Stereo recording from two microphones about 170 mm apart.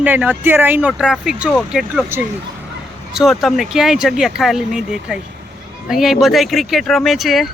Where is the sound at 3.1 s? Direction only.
Centre (ahead or behind).